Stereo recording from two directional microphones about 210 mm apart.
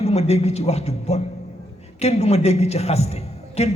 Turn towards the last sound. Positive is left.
turn(degrees=30)  # may be behind; listen again after turning